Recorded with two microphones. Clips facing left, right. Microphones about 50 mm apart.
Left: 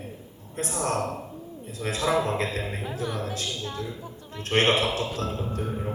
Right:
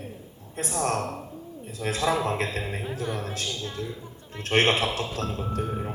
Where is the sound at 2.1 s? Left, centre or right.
Left.